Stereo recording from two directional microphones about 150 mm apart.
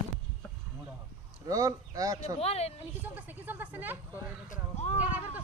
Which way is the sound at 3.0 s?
10° right (ahead or behind).